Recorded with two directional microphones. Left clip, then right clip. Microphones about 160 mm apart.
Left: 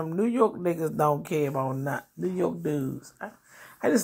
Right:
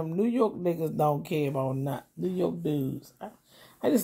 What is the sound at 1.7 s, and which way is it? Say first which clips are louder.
Speech: left 3 dB; centre (ahead or behind).